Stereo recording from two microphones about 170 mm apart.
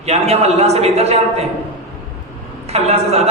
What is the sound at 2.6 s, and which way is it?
Speech, 40° right (ahead or behind).